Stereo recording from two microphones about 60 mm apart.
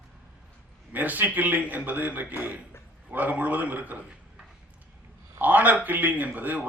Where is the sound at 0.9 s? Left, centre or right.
Right.